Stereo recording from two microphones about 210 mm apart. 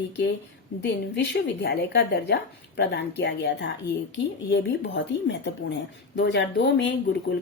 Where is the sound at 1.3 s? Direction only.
50° left (ahead or behind).